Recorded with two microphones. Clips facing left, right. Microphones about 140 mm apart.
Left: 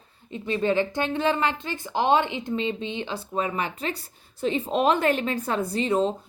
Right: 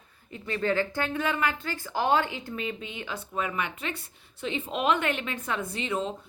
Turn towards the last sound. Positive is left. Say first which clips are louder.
# left 7 dB
turn(degrees=35)  # may be behind; listen again after turning